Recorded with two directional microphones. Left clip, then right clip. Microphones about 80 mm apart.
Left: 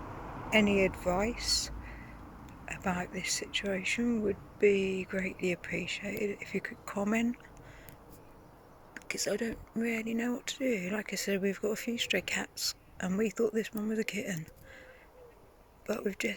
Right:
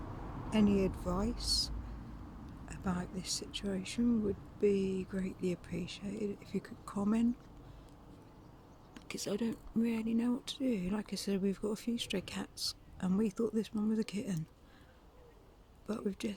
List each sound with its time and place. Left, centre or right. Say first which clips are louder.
0.1 s vehicle: left 4 dB; centre
0.5 s speech: left 6 dB; centre
9.0 s speech: left 5 dB; right
9.9 s speech: left 2 dB; right
15.9 s speech: left 6 dB; right